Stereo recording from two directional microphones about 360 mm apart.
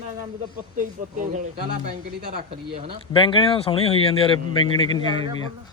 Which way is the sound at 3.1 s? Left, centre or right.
Centre.